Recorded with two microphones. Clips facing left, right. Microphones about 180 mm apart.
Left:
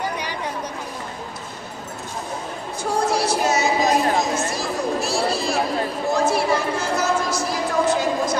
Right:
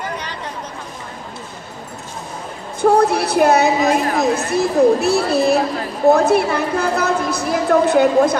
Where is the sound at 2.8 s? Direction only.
60° right (ahead or behind).